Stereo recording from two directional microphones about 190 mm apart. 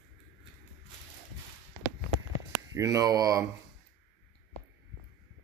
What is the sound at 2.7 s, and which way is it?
Speech, 20° right (ahead or behind).